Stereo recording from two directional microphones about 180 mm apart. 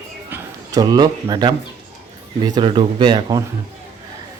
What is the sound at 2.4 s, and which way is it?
A man's voice, 25° right (ahead or behind).